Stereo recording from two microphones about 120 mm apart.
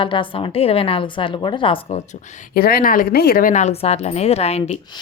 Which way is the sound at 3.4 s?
75° left (ahead or behind).